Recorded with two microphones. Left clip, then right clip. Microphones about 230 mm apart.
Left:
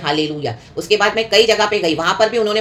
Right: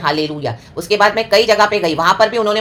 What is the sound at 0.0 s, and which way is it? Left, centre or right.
Speech, centre.